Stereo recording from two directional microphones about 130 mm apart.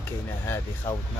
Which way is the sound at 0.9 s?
15° left (ahead or behind).